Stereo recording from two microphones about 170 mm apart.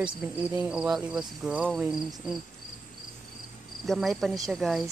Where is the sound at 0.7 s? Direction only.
Centre (ahead or behind).